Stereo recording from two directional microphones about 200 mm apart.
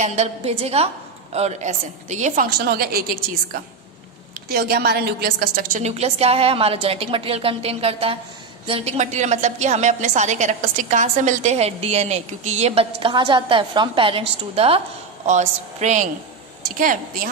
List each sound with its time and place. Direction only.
0.0 s a woman's voice: 35° right (ahead or behind); by 3.0 s 50° right (ahead or behind)
4.4 s a woman's voice: 50° right (ahead or behind)